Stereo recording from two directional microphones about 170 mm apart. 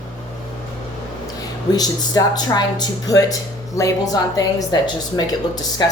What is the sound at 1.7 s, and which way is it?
A woman's voice, 20° left (ahead or behind).